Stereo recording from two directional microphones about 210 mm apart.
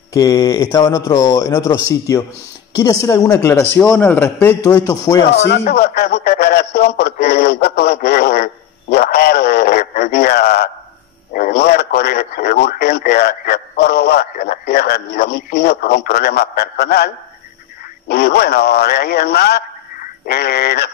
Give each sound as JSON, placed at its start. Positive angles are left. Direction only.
{"t": 0.1, "sound": "speech", "side_deg": 15}
{"t": 5.3, "sound": "a man's voice", "side_deg": 55}